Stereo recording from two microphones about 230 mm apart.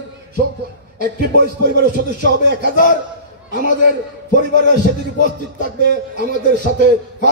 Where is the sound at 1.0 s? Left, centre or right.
Right.